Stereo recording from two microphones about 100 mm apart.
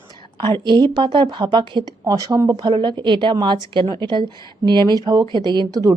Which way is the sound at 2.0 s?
35° right (ahead or behind).